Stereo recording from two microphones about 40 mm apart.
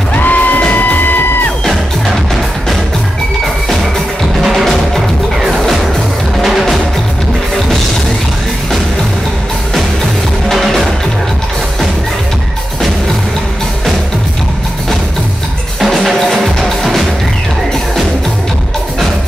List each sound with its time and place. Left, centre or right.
0.1 s music: left
4.4 s music: centre
15.8 s music: centre